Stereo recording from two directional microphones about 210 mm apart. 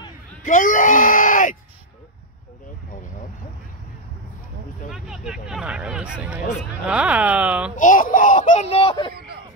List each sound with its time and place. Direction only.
0.4 s speech: 40° left (ahead or behind)
4.8 s speech: centre (ahead or behind)
7.7 s speech: 40° left (ahead or behind)